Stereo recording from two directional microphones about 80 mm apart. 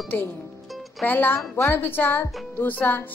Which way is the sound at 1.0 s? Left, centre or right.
Left.